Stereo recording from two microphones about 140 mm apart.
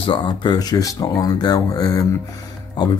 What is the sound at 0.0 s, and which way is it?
Speech, 35° left (ahead or behind).